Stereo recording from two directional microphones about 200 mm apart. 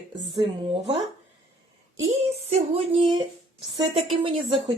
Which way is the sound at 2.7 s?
25° right (ahead or behind).